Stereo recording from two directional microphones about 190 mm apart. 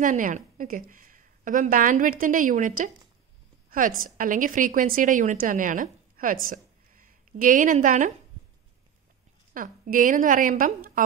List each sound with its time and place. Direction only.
0.0 s a woman's voice: 40° right (ahead or behind)
6.5 s a sound: 45° right (ahead or behind)
9.5 s a woman's voice: 45° right (ahead or behind)